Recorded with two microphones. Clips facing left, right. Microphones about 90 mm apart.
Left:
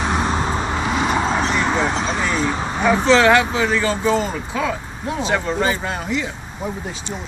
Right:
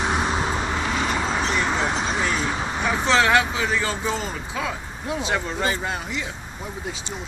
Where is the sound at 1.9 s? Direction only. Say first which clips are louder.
Left 3 dB; 10° right (ahead or behind).